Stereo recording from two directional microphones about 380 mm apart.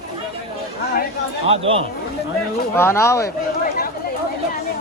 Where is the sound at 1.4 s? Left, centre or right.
Centre.